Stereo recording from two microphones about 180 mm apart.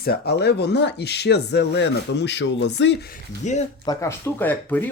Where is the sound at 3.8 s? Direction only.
20° left (ahead or behind).